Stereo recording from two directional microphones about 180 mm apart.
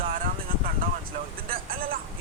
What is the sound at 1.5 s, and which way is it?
Speech, 55° right (ahead or behind).